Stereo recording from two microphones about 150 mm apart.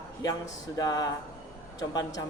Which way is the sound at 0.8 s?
25° left (ahead or behind).